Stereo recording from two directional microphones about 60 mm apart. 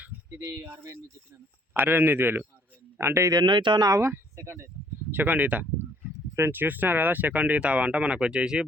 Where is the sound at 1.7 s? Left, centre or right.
Right.